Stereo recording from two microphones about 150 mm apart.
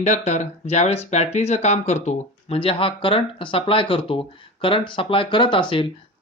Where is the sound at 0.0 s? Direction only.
50° left (ahead or behind).